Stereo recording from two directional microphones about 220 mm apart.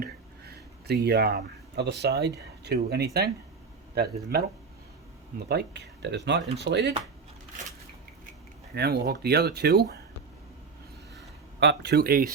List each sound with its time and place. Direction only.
0.0 s speech: 45° right (ahead or behind)
5.5 s speech: 50° right (ahead or behind)
8.7 s speech: 45° right (ahead or behind)
11.6 s speech: 50° right (ahead or behind)